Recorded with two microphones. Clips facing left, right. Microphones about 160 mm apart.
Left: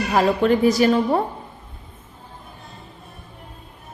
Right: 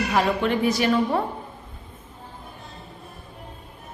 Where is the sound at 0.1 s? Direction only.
35° left (ahead or behind).